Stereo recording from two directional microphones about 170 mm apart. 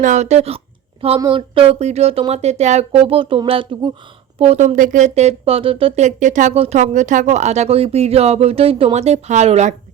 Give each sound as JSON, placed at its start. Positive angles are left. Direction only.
{"t": 0.0, "sound": "speech", "side_deg": -45}
{"t": 4.4, "sound": "speech", "side_deg": -40}